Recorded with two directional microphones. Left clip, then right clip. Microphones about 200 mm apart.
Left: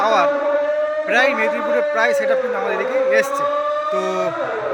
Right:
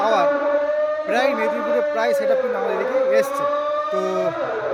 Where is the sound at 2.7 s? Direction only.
35° left (ahead or behind).